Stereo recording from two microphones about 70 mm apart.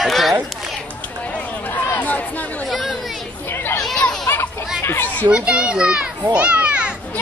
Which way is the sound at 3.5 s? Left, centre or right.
Left.